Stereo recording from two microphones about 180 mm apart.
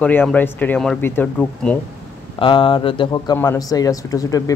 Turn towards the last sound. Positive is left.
turn(degrees=20)  # may be behind; listen again after turning